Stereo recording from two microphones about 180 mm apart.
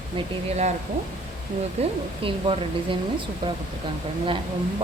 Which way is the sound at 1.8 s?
35° right (ahead or behind).